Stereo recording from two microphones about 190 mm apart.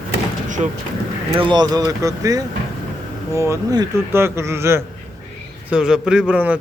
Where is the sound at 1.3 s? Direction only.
25° right (ahead or behind).